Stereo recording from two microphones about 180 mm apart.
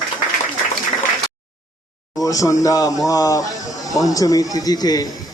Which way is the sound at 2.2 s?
20° left (ahead or behind).